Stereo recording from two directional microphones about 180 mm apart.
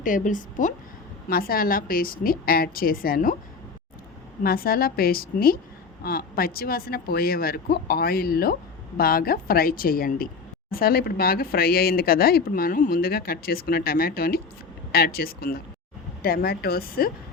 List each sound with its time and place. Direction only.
0.0 s a woman's voice: 45° left (ahead or behind)
4.4 s speech: 55° left (ahead or behind)